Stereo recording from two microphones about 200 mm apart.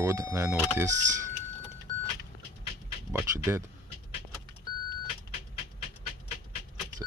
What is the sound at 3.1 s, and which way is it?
Speech, 15° right (ahead or behind).